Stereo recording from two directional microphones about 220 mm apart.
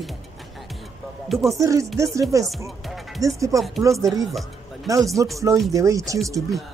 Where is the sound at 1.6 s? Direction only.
15° right (ahead or behind).